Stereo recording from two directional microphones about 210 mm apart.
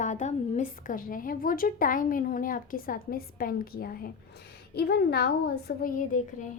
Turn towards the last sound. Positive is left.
turn(degrees=40)  # may be behind; listen again after turning